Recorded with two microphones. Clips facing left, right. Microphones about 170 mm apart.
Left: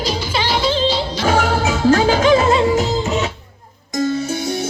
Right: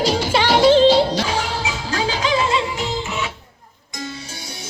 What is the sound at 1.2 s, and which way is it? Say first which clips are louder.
Music: left 7 dB; 45° left (ahead or behind).